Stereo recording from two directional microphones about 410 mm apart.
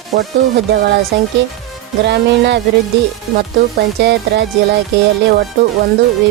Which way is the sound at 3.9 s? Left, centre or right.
Right.